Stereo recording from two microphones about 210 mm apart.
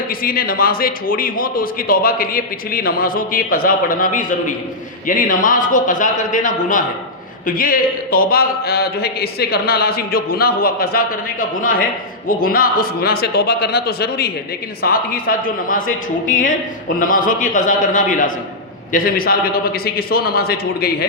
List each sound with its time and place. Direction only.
0.1 s a man's voice: 45° left (ahead or behind)